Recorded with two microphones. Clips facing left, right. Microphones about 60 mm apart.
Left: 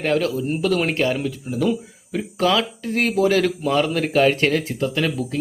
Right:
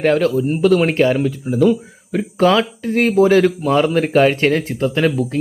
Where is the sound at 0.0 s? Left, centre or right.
Right.